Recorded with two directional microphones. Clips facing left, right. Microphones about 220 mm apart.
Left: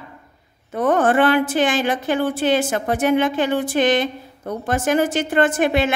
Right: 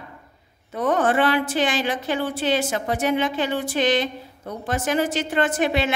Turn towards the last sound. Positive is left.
turn(degrees=50)  # may be behind; listen again after turning